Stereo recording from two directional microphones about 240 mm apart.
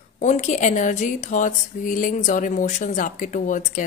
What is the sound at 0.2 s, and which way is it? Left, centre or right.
Speech, left.